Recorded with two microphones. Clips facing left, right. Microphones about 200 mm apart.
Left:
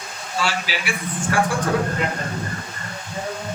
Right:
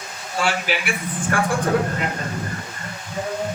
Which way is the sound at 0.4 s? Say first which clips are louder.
Right 3 dB; 55° right (ahead or behind).